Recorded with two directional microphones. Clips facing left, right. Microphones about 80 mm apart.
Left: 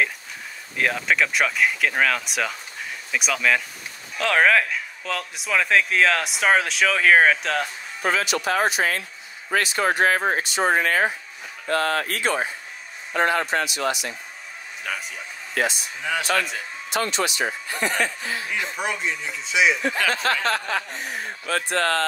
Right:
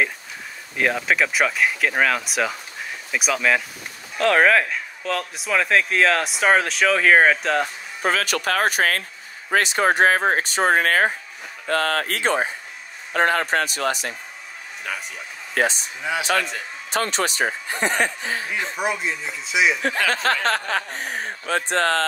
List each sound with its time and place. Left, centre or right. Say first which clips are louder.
0.7 s speech: right 1 dB; centre
8.0 s speech: right 1 dB; right
9.5 s speech: right 3 dB; right
12.2 s speech: right 2 dB; right
13.1 s speech: right 2 dB; right
14.8 s speech: even; centre
15.5 s speech: right 3 dB; right
16.0 s speech: right 1 dB; centre
16.9 s speech: right 1 dB; right
18.8 s speech: right 4 dB; centre
19.8 s speech: right 1 dB; right
20.2 s speech: right 2 dB; right
21.5 s speech: right 2 dB; right